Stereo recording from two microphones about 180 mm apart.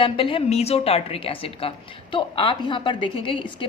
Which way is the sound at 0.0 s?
30° left (ahead or behind).